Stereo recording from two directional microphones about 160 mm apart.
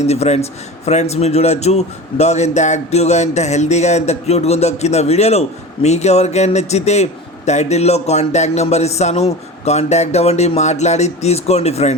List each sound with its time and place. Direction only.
0.0 s a man's voice: 40° left (ahead or behind)